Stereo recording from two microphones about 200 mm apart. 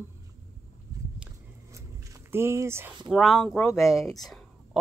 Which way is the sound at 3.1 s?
Centre (ahead or behind).